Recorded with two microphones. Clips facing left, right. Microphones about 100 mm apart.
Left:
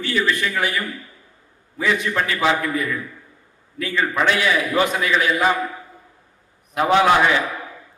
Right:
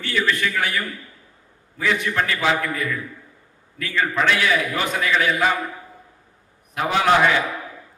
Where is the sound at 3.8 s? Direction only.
25° left (ahead or behind).